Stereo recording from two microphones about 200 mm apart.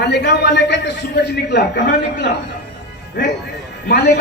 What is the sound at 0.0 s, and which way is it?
A man's voice, 60° left (ahead or behind).